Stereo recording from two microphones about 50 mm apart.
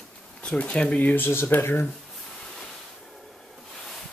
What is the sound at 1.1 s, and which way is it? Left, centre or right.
Speech, left.